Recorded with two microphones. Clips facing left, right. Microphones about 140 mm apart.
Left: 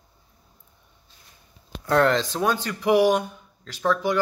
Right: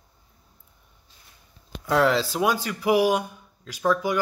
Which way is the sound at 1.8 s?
5° right (ahead or behind).